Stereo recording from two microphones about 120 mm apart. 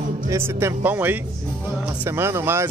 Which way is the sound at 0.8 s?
15° right (ahead or behind).